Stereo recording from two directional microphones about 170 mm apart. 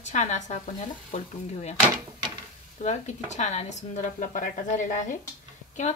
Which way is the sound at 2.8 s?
40° left (ahead or behind).